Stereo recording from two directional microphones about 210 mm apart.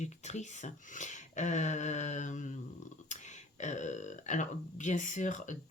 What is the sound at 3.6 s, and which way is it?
Speech, 35° left (ahead or behind).